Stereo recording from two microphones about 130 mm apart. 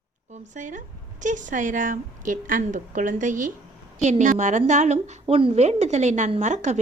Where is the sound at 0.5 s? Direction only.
75° right (ahead or behind).